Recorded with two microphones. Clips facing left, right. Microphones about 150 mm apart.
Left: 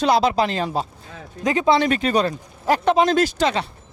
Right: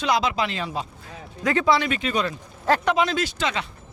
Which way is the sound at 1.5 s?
20° left (ahead or behind).